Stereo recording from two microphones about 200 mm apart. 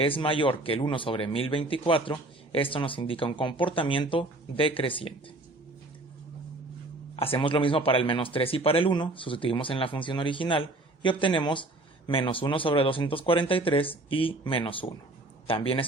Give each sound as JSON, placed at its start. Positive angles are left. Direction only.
{"t": 0.0, "sound": "speech", "side_deg": 25}
{"t": 7.2, "sound": "speech", "side_deg": 25}